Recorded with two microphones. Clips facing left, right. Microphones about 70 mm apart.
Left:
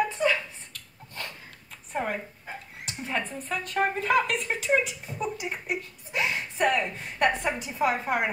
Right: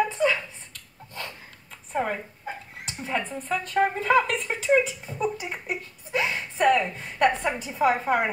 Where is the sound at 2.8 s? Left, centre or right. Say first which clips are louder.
Right 2 dB; right.